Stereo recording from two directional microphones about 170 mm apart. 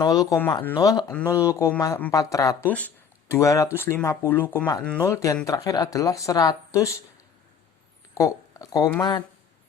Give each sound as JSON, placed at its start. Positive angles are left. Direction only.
{"t": 0.0, "sound": "speech", "side_deg": 20}
{"t": 8.1, "sound": "a sound", "side_deg": 20}
{"t": 9.0, "sound": "speech", "side_deg": 25}